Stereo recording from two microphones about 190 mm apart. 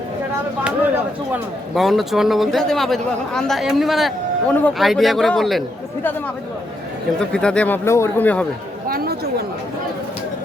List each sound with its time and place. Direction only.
1.3 s speech: centre (ahead or behind)
7.2 s speech: 5° left (ahead or behind)
8.9 s chatter: 50° right (ahead or behind)